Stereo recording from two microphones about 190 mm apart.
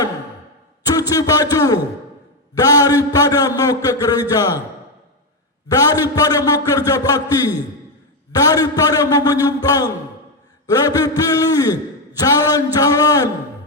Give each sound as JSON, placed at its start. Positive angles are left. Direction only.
{"t": 1.1, "sound": "a man's voice", "side_deg": 20}
{"t": 5.6, "sound": "a man's voice", "side_deg": 20}